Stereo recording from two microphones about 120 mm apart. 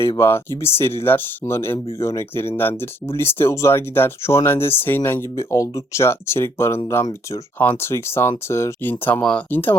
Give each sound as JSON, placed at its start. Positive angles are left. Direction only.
{"t": 0.2, "sound": "speech", "side_deg": 20}
{"t": 7.6, "sound": "speech", "side_deg": 20}